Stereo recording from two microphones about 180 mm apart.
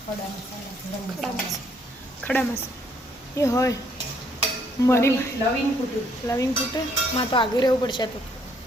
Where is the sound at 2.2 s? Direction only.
10° left (ahead or behind).